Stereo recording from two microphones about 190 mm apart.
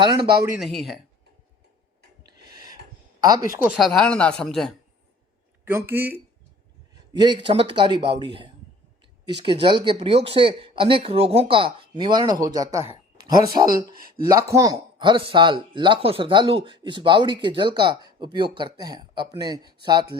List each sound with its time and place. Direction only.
0.0 s speech: 25° right (ahead or behind)
0.6 s speech: centre (ahead or behind)
2.5 s a sound: 20° right (ahead or behind)
3.2 s speech: 20° right (ahead or behind)
3.6 s speech: 5° right (ahead or behind)
5.6 s speech: 10° right (ahead or behind)
7.1 s speech: 25° right (ahead or behind)
13.9 s speech: 50° right (ahead or behind)
14.3 s speech: 15° right (ahead or behind)